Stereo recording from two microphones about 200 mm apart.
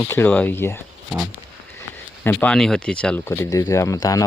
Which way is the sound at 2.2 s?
10° left (ahead or behind).